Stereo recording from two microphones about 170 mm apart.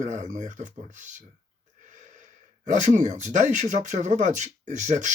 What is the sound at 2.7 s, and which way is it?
Speech, 45° right (ahead or behind).